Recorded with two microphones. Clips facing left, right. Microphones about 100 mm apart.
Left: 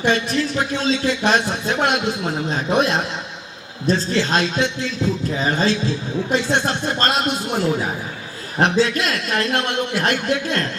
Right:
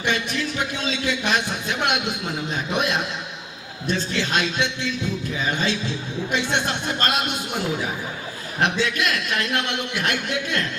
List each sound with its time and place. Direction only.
0.0 s speech: 35° left (ahead or behind)